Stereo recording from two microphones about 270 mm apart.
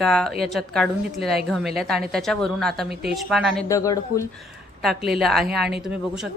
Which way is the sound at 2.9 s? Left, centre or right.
Right.